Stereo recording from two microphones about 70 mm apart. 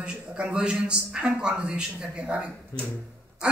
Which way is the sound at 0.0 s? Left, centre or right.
Centre.